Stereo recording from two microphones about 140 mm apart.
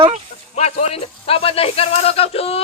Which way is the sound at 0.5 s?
50° left (ahead or behind).